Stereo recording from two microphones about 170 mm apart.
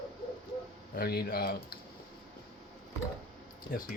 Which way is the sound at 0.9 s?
65° left (ahead or behind).